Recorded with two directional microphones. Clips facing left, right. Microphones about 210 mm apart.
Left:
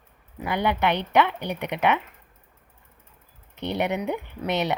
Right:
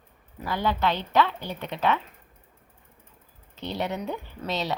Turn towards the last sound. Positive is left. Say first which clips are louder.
# left 4 dB
turn(degrees=20)  # may be behind; listen again after turning